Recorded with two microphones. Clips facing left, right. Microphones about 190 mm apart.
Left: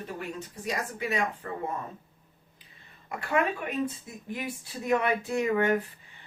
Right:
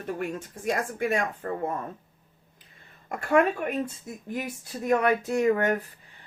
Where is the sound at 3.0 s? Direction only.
50° right (ahead or behind).